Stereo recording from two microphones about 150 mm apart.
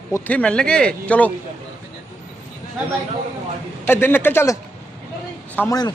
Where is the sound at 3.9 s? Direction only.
15° left (ahead or behind).